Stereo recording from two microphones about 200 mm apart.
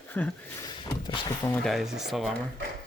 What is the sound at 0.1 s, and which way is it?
Speech, 10° left (ahead or behind).